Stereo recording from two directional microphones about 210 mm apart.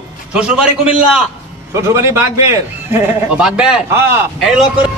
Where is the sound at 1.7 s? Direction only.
15° right (ahead or behind).